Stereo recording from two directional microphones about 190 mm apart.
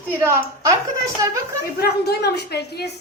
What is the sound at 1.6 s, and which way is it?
A woman's voice, 55° left (ahead or behind).